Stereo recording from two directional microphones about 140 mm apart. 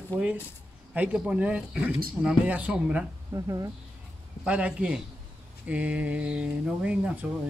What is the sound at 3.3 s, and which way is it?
Speech, 25° right (ahead or behind).